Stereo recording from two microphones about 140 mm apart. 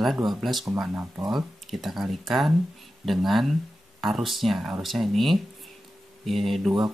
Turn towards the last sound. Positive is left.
turn(degrees=0)  # may be behind; listen again after turning